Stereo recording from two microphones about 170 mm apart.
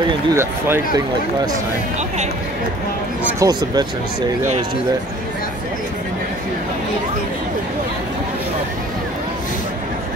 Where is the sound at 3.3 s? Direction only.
20° right (ahead or behind).